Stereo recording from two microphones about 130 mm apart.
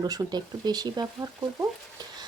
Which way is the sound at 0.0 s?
30° right (ahead or behind).